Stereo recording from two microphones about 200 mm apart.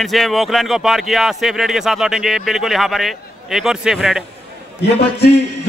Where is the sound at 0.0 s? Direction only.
Centre (ahead or behind).